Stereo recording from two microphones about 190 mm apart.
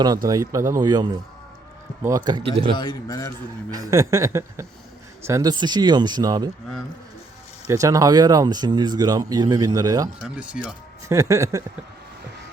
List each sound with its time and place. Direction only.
0.3 s speech: 15° right (ahead or behind)
2.7 s a man's voice: 20° left (ahead or behind)
3.7 s a sound: 20° right (ahead or behind)
5.2 s speech: 15° right (ahead or behind)
7.7 s speech: 15° right (ahead or behind)
10.2 s speech: 5° right (ahead or behind)
11.1 s a sound: 15° right (ahead or behind)